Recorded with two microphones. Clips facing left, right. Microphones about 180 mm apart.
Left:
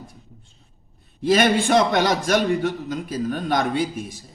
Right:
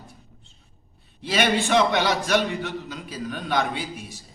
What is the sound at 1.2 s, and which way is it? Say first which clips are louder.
A man's voice: left 5 dB; 50° left (ahead or behind).